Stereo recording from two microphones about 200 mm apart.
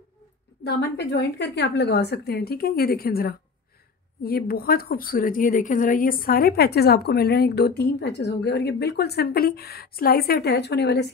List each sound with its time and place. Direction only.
0.7 s a woman's voice: 55° left (ahead or behind)